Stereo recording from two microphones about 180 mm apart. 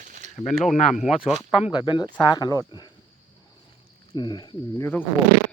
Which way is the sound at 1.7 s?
25° left (ahead or behind).